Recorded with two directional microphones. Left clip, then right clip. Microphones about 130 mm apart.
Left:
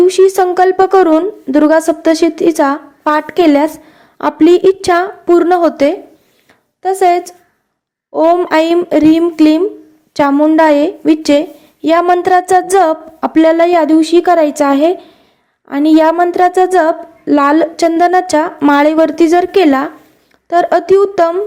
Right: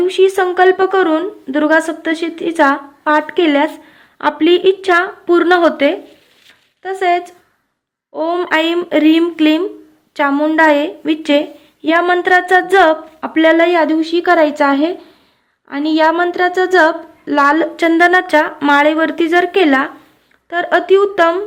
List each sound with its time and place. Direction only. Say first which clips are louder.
0.0 s a woman's voice: left 4 dB; 45° left (ahead or behind)
5.5 s speech: left 1 dB; 10° left (ahead or behind)
5.7 s a woman's voice: left 2 dB; 45° left (ahead or behind)
8.5 s a woman's voice: left 4 dB; 45° left (ahead or behind)
10.3 s a woman's voice: left 5 dB; 20° left (ahead or behind)
10.6 s a woman's voice: left 2 dB; 40° left (ahead or behind)